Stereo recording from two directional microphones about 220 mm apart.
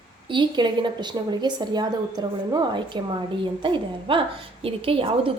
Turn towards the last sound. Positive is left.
turn(degrees=-25)  # may be behind; listen again after turning